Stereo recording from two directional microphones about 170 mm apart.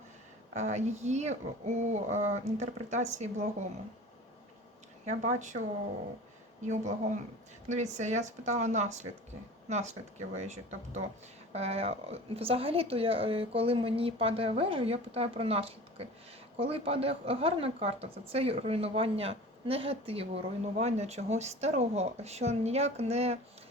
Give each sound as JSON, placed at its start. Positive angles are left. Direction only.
{"t": 0.5, "sound": "speech", "side_deg": -40}
{"t": 5.0, "sound": "speech", "side_deg": -45}
{"t": 6.7, "sound": "a woman's voice", "side_deg": -45}